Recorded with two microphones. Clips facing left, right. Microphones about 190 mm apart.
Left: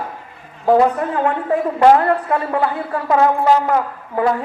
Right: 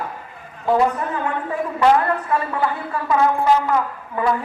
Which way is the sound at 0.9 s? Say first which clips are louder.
Left 5 dB; 60° left (ahead or behind).